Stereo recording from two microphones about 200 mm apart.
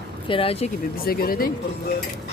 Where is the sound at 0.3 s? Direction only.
25° left (ahead or behind).